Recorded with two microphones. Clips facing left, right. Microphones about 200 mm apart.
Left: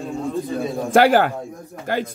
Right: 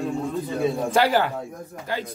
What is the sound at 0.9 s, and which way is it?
Speech, 50° left (ahead or behind).